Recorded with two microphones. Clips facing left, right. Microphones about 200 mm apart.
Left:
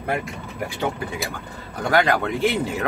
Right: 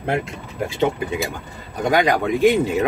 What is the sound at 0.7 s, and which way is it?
Speech, 25° right (ahead or behind).